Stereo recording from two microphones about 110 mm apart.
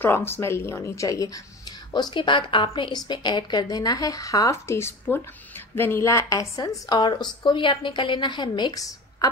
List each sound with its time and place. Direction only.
0.0 s a woman's voice: 20° left (ahead or behind)
2.0 s a woman's voice: 45° left (ahead or behind)